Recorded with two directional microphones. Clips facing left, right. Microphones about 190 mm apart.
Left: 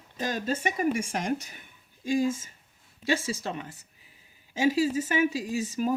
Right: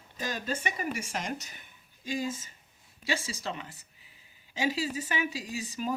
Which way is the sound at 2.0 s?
50° left (ahead or behind).